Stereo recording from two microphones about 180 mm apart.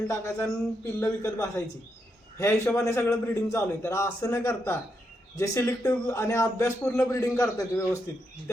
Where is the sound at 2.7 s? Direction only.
15° left (ahead or behind).